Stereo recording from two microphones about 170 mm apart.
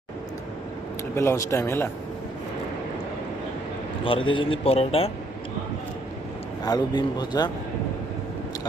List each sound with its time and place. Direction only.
1.1 s speech: 15° left (ahead or behind)
4.0 s a man's voice: 30° left (ahead or behind)
6.7 s speech: 25° left (ahead or behind)